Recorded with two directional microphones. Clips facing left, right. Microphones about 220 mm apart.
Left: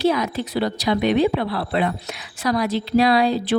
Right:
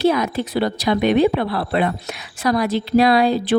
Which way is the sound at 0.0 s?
55° right (ahead or behind).